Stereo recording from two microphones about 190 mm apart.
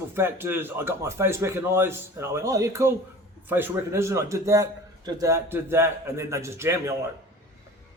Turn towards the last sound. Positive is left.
turn(degrees=-15)  # may be behind; listen again after turning